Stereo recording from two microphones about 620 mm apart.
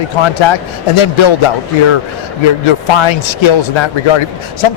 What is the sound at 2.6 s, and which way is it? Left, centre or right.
A man's voice, left.